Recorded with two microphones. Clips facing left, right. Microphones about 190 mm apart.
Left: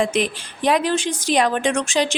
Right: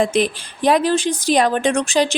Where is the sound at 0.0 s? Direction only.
35° right (ahead or behind).